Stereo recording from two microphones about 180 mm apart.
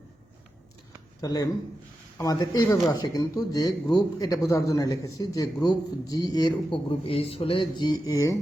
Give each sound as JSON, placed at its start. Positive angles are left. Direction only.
{"t": 1.2, "sound": "speech", "side_deg": 20}